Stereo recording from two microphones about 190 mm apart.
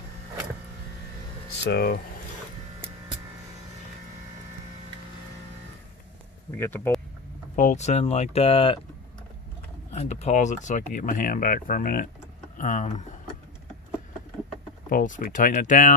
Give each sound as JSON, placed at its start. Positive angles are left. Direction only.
{"t": 1.6, "sound": "speech", "side_deg": 60}
{"t": 6.5, "sound": "speech", "side_deg": 10}
{"t": 7.5, "sound": "speech", "side_deg": 40}
{"t": 9.9, "sound": "speech", "side_deg": 35}
{"t": 14.9, "sound": "speech", "side_deg": 45}